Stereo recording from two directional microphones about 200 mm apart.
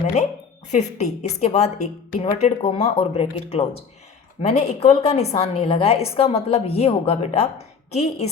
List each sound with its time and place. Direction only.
0.7 s a woman's voice: 35° left (ahead or behind)